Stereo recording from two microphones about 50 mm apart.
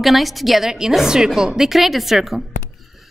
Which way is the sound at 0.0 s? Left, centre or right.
Centre.